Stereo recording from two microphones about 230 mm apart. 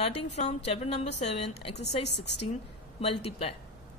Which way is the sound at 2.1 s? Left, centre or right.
Left.